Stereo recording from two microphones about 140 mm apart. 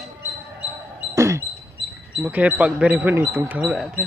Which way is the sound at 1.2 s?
20° right (ahead or behind).